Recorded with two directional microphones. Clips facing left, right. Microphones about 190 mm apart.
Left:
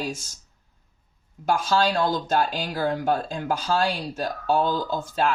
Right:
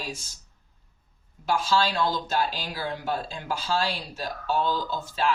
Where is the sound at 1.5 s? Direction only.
45° left (ahead or behind).